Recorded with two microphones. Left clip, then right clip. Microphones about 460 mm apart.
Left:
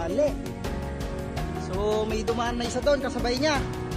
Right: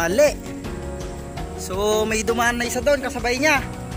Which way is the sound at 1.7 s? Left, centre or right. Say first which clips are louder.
Right 6 dB; left.